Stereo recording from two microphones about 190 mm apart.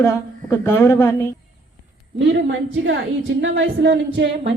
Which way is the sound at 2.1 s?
70° right (ahead or behind).